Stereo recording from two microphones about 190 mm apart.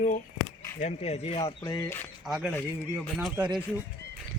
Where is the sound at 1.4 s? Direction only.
20° left (ahead or behind).